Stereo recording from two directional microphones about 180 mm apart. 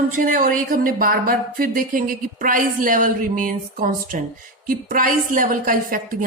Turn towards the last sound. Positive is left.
turn(degrees=-50)  # may be behind; listen again after turning